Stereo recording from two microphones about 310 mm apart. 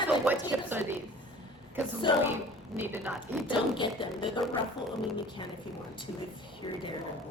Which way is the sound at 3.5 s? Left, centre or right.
Centre.